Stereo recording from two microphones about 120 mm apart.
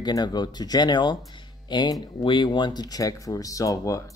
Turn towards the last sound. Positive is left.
turn(degrees=25)  # may be behind; listen again after turning